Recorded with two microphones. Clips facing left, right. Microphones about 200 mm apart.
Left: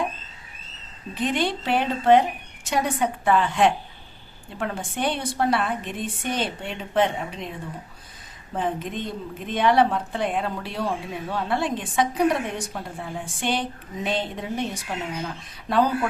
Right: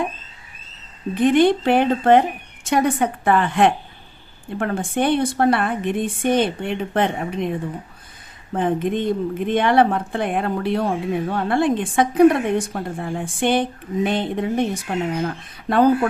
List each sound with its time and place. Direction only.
1.1 s a woman's voice: 55° right (ahead or behind)
8.5 s speech: 55° right (ahead or behind)